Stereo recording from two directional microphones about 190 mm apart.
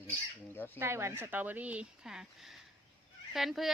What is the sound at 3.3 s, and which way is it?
Speech, centre (ahead or behind).